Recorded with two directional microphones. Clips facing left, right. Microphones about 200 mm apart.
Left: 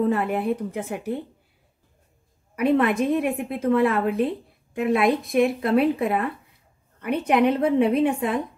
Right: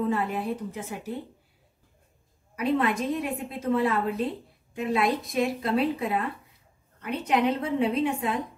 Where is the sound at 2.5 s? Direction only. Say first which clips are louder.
Left 5 dB; 60° left (ahead or behind).